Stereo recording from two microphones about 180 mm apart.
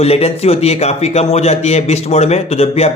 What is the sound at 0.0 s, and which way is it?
A man's voice, 35° left (ahead or behind).